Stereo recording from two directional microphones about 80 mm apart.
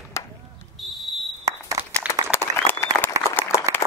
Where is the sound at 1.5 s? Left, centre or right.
Right.